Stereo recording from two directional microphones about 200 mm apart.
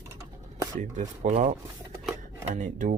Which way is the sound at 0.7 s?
40° right (ahead or behind).